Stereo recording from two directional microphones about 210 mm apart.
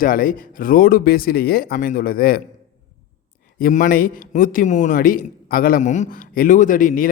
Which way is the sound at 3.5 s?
40° left (ahead or behind).